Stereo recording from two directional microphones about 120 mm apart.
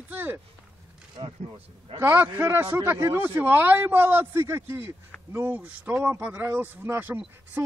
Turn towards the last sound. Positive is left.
turn(degrees=-20)  # may be behind; listen again after turning